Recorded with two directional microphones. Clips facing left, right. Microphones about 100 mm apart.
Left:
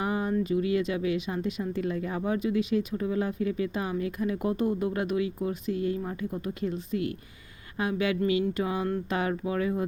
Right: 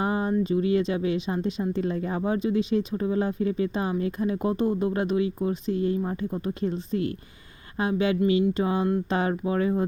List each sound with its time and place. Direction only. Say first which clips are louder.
0.0 s speech: right 3 dB; 30° right (ahead or behind)